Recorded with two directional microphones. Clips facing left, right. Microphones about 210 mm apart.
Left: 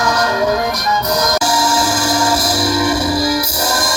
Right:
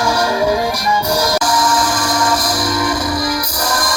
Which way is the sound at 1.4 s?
25° left (ahead or behind).